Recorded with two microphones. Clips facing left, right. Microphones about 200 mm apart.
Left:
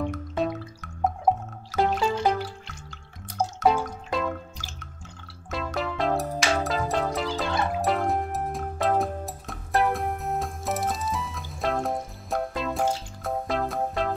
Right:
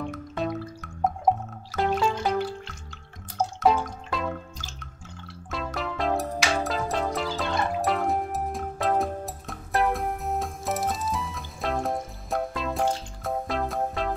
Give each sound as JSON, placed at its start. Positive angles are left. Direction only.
{"t": 0.1, "sound": "music", "side_deg": 0}
{"t": 5.5, "sound": "music", "side_deg": 0}